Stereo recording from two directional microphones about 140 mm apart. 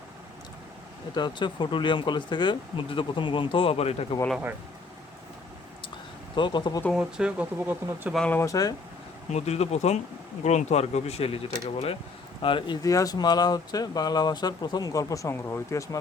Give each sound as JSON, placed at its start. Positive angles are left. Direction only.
{"t": 1.1, "sound": "speech", "side_deg": 35}
{"t": 6.3, "sound": "speech", "side_deg": 35}
{"t": 6.9, "sound": "speech", "side_deg": -5}
{"t": 8.1, "sound": "speech", "side_deg": 5}
{"t": 8.4, "sound": "speech", "side_deg": 25}
{"t": 9.3, "sound": "speech", "side_deg": 50}